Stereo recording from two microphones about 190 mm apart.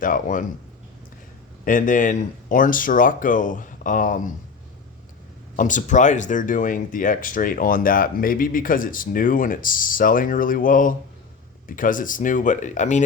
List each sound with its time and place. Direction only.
0.0 s speech: 45° left (ahead or behind)
1.6 s speech: 45° left (ahead or behind)
5.5 s speech: 40° left (ahead or behind)